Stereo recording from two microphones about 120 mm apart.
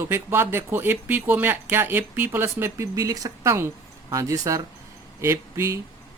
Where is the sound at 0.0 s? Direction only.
20° right (ahead or behind).